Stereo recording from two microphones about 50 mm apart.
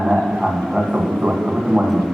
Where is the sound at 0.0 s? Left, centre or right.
Centre.